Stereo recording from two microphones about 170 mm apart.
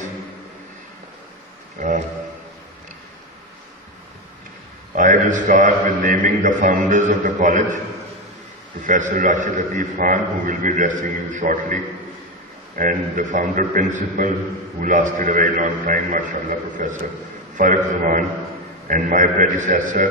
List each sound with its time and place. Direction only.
4.9 s a man's voice: 50° right (ahead or behind)
8.8 s a man's voice: 50° right (ahead or behind)